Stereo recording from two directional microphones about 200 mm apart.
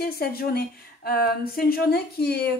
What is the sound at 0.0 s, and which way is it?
Speech, 50° left (ahead or behind).